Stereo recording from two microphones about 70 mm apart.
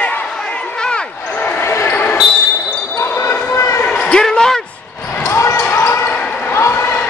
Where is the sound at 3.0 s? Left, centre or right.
Left.